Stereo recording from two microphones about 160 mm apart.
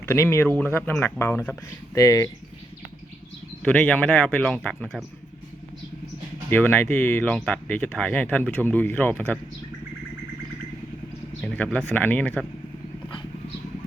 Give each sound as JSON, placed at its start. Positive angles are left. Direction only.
{"t": 0.0, "sound": "speech", "side_deg": 15}
{"t": 3.6, "sound": "speech", "side_deg": 10}
{"t": 6.5, "sound": "speech", "side_deg": 10}
{"t": 11.4, "sound": "speech", "side_deg": 10}